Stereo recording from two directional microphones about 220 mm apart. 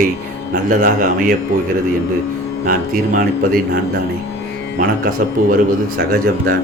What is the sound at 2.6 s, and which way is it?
Speech, 40° right (ahead or behind).